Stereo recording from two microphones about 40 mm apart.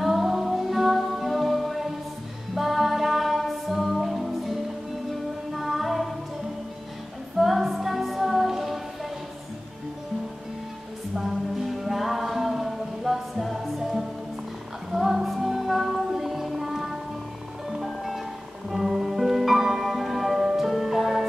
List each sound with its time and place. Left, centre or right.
0.0 s music: centre
7.3 s music: centre
11.1 s music: centre